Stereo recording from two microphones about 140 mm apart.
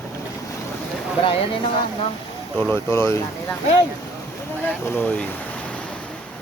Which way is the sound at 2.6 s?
15° left (ahead or behind).